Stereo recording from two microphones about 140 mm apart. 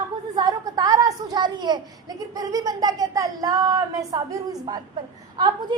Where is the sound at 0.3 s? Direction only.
25° right (ahead or behind).